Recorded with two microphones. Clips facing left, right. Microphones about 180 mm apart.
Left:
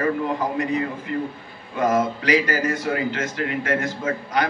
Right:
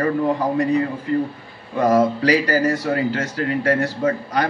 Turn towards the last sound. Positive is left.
turn(degrees=-35)  # may be behind; listen again after turning